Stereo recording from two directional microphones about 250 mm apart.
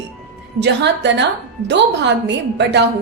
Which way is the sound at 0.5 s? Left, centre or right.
Right.